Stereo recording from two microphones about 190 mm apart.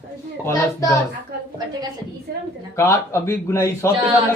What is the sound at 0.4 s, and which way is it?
Speech, 15° left (ahead or behind).